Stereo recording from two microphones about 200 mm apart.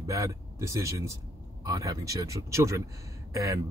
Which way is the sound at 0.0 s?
15° right (ahead or behind).